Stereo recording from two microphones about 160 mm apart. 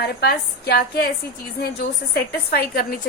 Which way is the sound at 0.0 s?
85° left.